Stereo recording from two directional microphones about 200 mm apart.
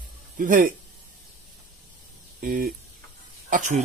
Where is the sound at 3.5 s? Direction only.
40° right (ahead or behind).